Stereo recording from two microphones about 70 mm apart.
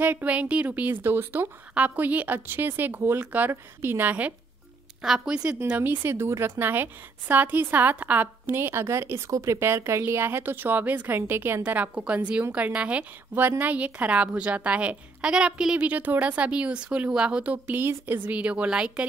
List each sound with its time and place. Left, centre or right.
0.0 s a woman's voice: right
1.7 s a woman's voice: right
5.0 s a woman's voice: centre
5.8 s speech: right
6.6 s a woman's voice: right
13.3 s a woman's voice: right
17.6 s a woman's voice: right